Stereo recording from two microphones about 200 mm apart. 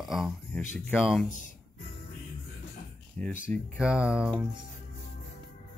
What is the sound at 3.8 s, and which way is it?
Speech, 5° right (ahead or behind).